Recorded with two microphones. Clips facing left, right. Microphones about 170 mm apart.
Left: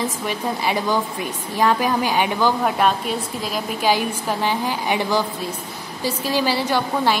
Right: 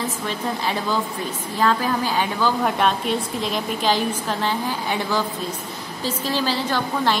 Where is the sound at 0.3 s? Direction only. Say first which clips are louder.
Left 2 dB; 10° left (ahead or behind).